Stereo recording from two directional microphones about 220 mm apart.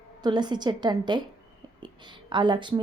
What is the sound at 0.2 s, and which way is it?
A woman's voice, 20° right (ahead or behind).